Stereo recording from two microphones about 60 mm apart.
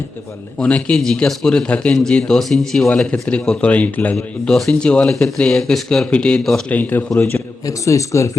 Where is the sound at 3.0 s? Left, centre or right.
Centre.